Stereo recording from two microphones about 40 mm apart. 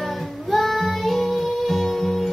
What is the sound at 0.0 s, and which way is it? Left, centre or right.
Music, centre.